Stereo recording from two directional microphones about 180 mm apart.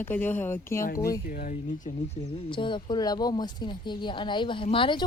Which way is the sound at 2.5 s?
25° left (ahead or behind).